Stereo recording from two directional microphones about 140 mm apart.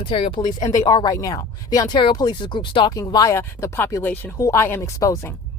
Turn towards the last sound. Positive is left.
turn(degrees=20)  # may be behind; listen again after turning